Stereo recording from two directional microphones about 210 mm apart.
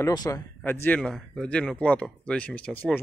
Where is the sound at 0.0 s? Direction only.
15° left (ahead or behind).